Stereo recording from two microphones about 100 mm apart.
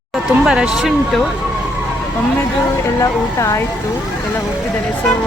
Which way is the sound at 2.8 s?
35° left (ahead or behind).